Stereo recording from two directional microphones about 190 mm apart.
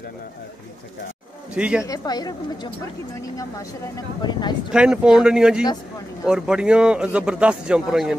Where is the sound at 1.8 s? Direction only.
20° left (ahead or behind).